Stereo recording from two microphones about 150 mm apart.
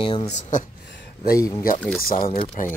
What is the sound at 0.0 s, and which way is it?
Speech, 35° left (ahead or behind).